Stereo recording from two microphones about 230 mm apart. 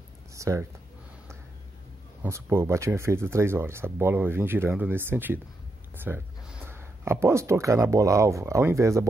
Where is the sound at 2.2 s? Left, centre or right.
Centre.